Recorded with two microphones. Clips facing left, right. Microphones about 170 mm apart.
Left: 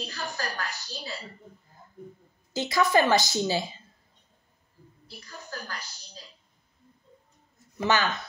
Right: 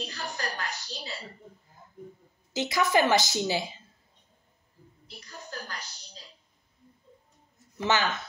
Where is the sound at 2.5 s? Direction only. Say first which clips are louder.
Left 2 dB; 20° right (ahead or behind).